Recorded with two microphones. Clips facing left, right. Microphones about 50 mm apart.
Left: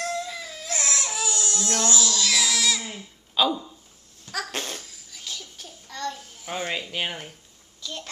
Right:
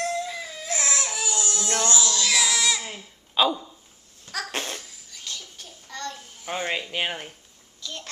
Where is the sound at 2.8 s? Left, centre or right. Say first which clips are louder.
Even; centre.